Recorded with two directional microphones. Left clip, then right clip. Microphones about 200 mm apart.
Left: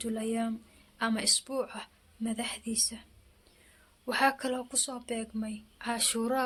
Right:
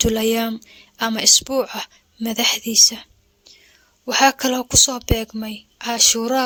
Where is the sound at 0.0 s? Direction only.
50° right (ahead or behind).